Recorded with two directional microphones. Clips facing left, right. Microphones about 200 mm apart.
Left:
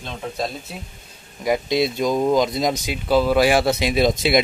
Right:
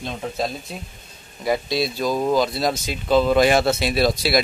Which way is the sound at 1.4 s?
15° left (ahead or behind).